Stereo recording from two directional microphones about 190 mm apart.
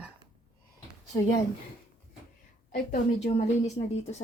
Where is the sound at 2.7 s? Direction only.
40° left (ahead or behind).